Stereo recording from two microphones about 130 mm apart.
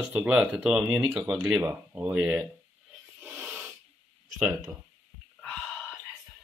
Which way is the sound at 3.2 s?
10° right (ahead or behind).